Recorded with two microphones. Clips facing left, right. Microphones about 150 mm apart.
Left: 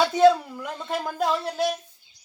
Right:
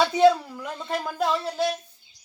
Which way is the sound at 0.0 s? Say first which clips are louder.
Left 1 dB; centre (ahead or behind).